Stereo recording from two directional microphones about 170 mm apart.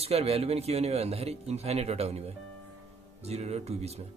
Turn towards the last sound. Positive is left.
turn(degrees=-40)  # may be behind; listen again after turning